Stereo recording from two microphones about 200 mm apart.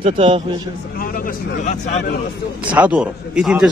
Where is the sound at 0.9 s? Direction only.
45° left (ahead or behind).